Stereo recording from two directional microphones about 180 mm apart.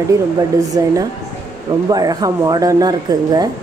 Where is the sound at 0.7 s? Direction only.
20° right (ahead or behind).